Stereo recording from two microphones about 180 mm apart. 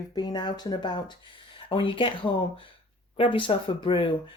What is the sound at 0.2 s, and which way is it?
Speech, 25° left (ahead or behind).